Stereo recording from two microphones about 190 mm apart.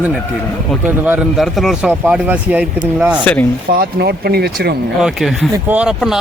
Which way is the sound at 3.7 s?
55° right (ahead or behind).